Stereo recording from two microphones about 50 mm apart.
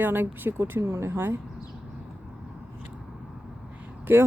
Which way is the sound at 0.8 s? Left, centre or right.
Right.